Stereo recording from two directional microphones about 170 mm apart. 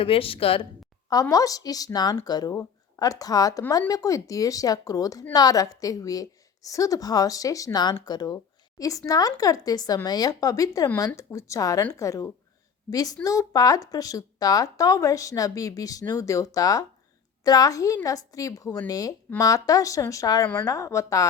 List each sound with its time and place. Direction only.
0.0 s a woman's voice: 35° left (ahead or behind)
1.1 s a woman's voice: 20° left (ahead or behind)